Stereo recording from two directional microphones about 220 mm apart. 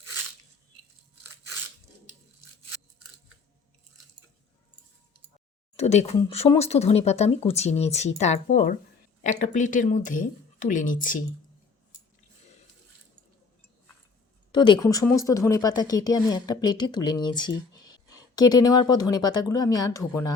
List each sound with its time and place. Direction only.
5.7 s speech: 30° left (ahead or behind)
14.5 s speech: 20° left (ahead or behind)